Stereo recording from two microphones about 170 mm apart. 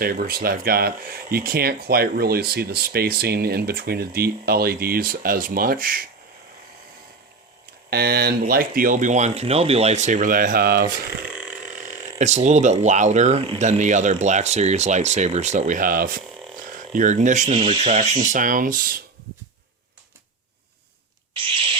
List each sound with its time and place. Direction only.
0.0 s speech: 60° right (ahead or behind)
7.9 s speech: 70° right (ahead or behind)
11.3 s burping: 5° right (ahead or behind)
12.2 s speech: 40° right (ahead or behind)
17.6 s speech: 35° right (ahead or behind); by 18.9 s 55° right (ahead or behind)